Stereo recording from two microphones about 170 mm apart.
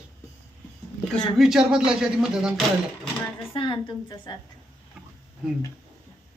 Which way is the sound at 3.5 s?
30° left (ahead or behind).